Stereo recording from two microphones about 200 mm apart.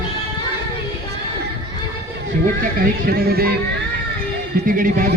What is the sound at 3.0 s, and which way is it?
Music, 50° right (ahead or behind).